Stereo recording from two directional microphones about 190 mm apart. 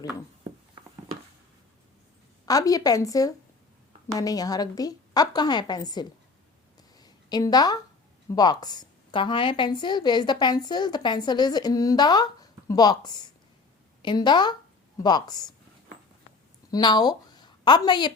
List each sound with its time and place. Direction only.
2.5 s a woman's voice: 20° left (ahead or behind)
7.0 s a sound: 20° left (ahead or behind)
8.3 s a woman's voice: 20° left (ahead or behind)
16.7 s a woman's voice: 20° left (ahead or behind)